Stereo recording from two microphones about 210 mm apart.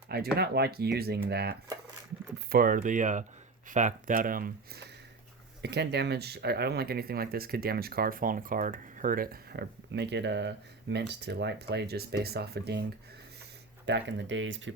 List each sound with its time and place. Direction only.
0.1 s speech: 50° right (ahead or behind)
13.8 s speech: 55° right (ahead or behind)